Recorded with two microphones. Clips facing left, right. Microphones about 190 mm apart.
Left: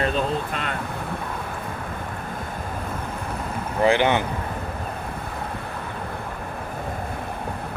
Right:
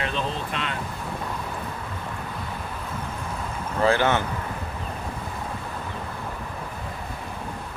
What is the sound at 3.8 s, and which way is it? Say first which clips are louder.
Speech: left 2 dB; 15° left (ahead or behind).